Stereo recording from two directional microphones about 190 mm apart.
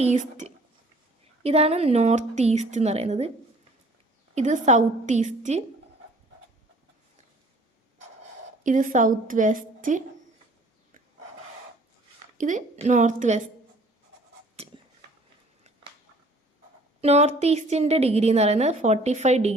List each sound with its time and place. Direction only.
0.0 s a woman's voice: 40° right (ahead or behind)
4.4 s a woman's voice: 40° right (ahead or behind)
8.6 s a woman's voice: 40° right (ahead or behind)
12.4 s a woman's voice: 40° right (ahead or behind)
14.6 s a sound: 30° right (ahead or behind)
17.0 s a woman's voice: 35° right (ahead or behind)